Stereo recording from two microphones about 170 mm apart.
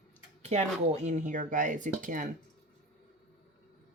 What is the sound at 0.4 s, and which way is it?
Speech, 40° right (ahead or behind).